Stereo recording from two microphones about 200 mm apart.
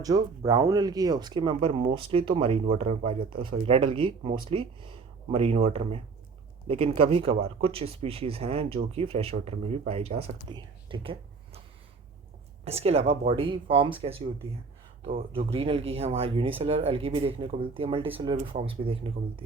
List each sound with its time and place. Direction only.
0.0 s speech: 20° right (ahead or behind)
12.6 s speech: 30° right (ahead or behind)
15.4 s speech: 30° right (ahead or behind)